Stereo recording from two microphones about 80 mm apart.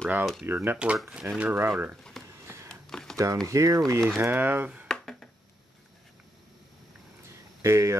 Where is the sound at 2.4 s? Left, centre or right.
Right.